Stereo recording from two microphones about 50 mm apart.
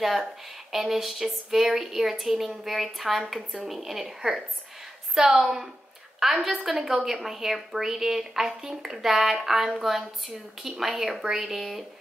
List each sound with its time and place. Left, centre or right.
0.0 s speech: centre
5.4 s a woman's voice: centre